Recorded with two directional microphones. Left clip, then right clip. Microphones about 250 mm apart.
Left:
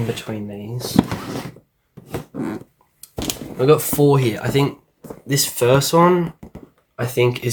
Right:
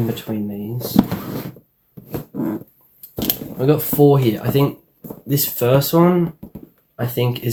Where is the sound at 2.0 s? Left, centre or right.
Centre.